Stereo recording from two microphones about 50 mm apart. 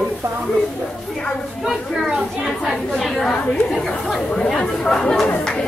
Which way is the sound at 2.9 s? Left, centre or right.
Centre.